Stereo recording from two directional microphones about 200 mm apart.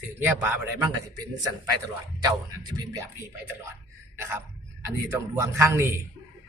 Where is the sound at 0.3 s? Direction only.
10° right (ahead or behind).